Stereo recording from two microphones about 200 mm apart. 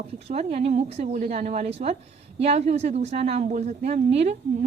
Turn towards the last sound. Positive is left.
turn(degrees=-35)  # may be behind; listen again after turning